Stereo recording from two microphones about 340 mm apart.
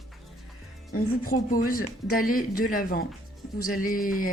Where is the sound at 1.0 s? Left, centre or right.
Left.